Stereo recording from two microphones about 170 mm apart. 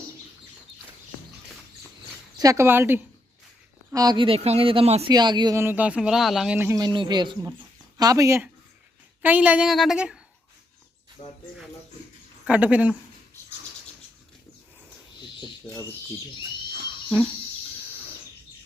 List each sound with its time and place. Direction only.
2.4 s speech: 20° right (ahead or behind)
3.9 s speech: 25° right (ahead or behind); by 6.6 s centre (ahead or behind)
6.6 s a woman's voice: 20° right (ahead or behind)
11.2 s speech: 30° left (ahead or behind)
12.5 s speech: 10° right (ahead or behind)